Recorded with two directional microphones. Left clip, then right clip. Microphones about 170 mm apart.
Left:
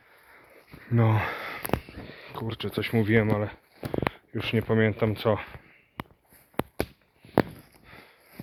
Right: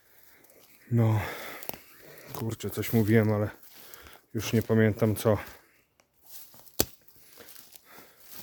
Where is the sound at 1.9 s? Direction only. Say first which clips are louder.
Left 7 dB; 45° right (ahead or behind).